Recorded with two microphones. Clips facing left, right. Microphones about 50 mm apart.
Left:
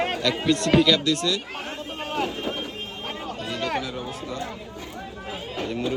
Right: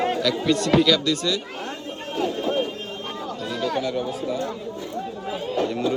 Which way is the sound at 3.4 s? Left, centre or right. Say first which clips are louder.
Right 1 dB; left.